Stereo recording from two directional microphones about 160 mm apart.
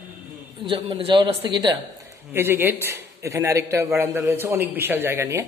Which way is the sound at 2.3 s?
15° right (ahead or behind).